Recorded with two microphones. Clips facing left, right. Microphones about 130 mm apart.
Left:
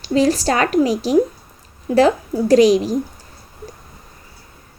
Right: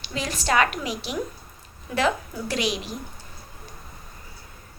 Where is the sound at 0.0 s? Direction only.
35° left (ahead or behind).